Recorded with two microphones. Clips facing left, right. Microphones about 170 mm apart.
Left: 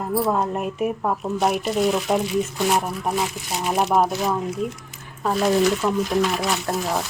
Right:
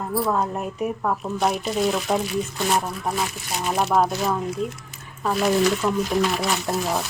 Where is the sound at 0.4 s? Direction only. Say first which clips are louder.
Left 2 dB; 10° left (ahead or behind).